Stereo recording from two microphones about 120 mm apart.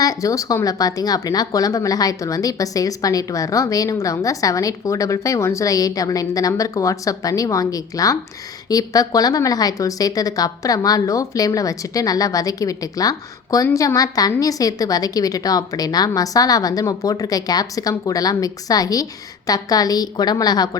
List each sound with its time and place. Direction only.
0.0 s a woman's voice: 30° left (ahead or behind)